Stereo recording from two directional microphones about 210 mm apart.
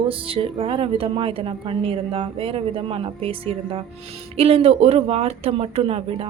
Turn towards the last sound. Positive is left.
turn(degrees=-25)  # may be behind; listen again after turning